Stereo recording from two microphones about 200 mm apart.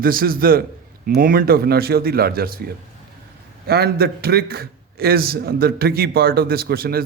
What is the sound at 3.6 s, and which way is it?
A man's voice, 55° right (ahead or behind).